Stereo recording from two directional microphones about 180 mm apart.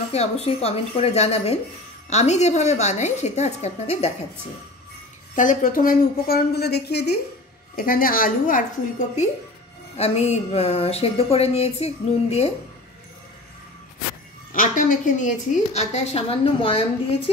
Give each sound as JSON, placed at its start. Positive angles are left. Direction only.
{"t": 0.1, "sound": "speech", "side_deg": 35}
{"t": 5.3, "sound": "speech", "side_deg": 45}
{"t": 7.7, "sound": "a woman's voice", "side_deg": 50}
{"t": 14.5, "sound": "speech", "side_deg": 45}